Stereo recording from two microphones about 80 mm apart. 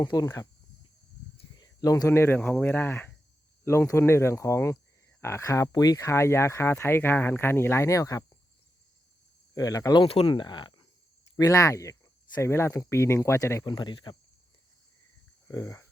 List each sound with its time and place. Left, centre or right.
0.0 s speech: left
1.5 s speech: left
3.6 s speech: left
9.6 s speech: left
9.9 s speech: left
11.3 s speech: left
13.7 s speech: left
15.4 s speech: left